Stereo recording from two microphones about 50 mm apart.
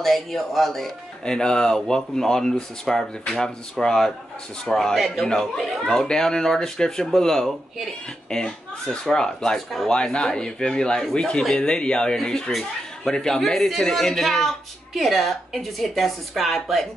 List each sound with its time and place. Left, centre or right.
0.0 s a woman's voice: centre
4.9 s a woman's voice: centre
5.2 s a woman's voice: centre